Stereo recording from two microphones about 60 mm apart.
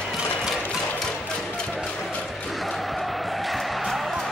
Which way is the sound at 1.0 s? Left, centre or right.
Centre.